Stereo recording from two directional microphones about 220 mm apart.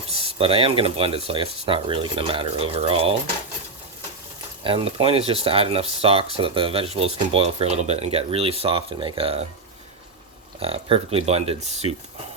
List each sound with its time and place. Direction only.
0.1 s speech: 25° right (ahead or behind)
4.6 s speech: 25° right (ahead or behind)
10.6 s speech: 25° right (ahead or behind)